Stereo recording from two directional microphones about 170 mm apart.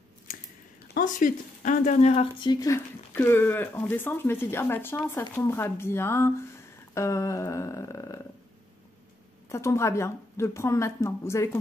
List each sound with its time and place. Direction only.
0.9 s speech: 50° left (ahead or behind)
2.4 s speech: 25° left (ahead or behind)
6.9 s humming: 15° left (ahead or behind)
9.5 s speech: 15° left (ahead or behind)